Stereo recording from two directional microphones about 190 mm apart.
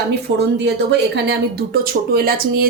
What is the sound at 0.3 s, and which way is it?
Speech, 65° right (ahead or behind).